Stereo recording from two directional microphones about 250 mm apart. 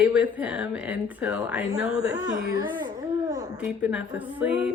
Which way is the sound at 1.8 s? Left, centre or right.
Left.